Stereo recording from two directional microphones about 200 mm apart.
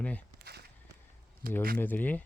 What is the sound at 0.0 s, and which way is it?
Walk, 5° left (ahead or behind).